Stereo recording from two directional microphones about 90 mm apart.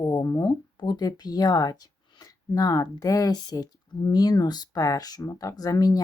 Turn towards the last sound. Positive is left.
turn(degrees=40)  # may be behind; listen again after turning